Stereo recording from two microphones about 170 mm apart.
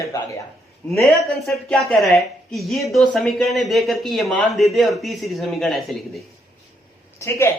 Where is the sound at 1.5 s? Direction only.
Centre (ahead or behind).